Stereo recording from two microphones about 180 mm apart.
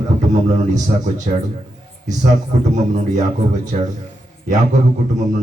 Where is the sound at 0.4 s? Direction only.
45° right (ahead or behind).